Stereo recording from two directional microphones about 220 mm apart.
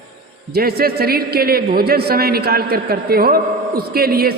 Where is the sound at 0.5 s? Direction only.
45° right (ahead or behind).